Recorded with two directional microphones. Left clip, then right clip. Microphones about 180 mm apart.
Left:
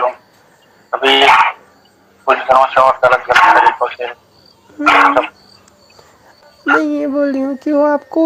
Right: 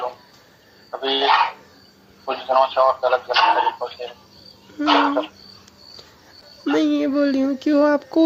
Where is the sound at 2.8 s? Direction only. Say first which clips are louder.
Left 7 dB; 55° left (ahead or behind); by 5.2 s 35° left (ahead or behind).